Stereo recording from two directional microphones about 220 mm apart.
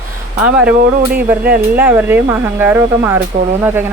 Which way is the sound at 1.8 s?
10° right (ahead or behind).